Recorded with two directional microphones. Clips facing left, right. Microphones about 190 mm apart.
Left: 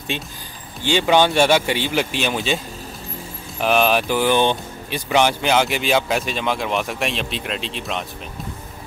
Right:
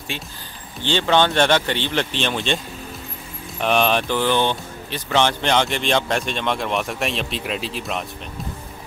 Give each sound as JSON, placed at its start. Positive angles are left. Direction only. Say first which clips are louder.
{"t": 0.1, "sound": "speech", "louder": "left 3 dB", "side_deg": 20}